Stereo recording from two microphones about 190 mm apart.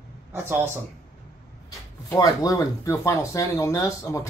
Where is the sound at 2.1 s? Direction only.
20° left (ahead or behind).